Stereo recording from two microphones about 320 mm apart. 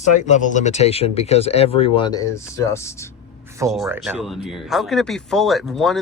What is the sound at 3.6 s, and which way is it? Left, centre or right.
A man's voice, centre.